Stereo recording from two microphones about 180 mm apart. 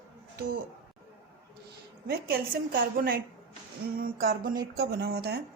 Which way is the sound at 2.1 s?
60° right (ahead or behind).